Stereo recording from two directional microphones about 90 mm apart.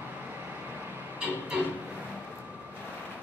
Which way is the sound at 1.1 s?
15° right (ahead or behind).